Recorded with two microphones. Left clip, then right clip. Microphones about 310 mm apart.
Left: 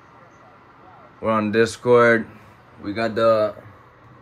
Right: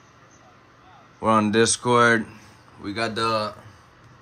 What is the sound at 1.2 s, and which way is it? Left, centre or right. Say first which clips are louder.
Speech: even; centre.